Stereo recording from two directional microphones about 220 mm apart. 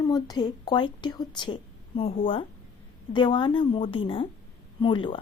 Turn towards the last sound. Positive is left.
turn(degrees=25)  # may be behind; listen again after turning